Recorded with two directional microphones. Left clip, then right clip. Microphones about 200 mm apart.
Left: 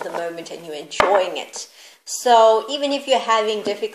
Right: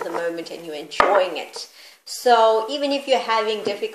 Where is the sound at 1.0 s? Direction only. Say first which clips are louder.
Even; 25° left (ahead or behind).